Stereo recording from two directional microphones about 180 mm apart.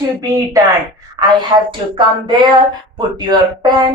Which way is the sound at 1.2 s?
25° right (ahead or behind).